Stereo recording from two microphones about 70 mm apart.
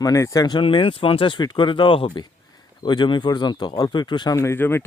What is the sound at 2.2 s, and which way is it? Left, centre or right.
Speech, left.